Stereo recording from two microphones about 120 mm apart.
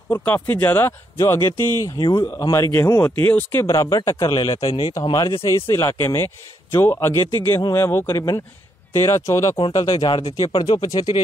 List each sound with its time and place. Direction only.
0.1 s speech: 15° left (ahead or behind)
3.6 s speech: 30° left (ahead or behind)